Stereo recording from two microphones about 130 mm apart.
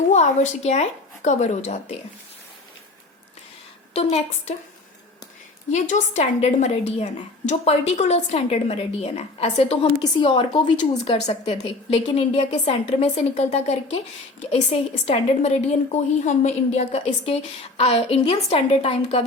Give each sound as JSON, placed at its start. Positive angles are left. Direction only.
{"t": 0.1, "sound": "a woman's voice", "side_deg": 60}
{"t": 3.9, "sound": "a woman's voice", "side_deg": 50}
{"t": 5.7, "sound": "a woman's voice", "side_deg": 65}
{"t": 10.0, "sound": "a woman's voice", "side_deg": 40}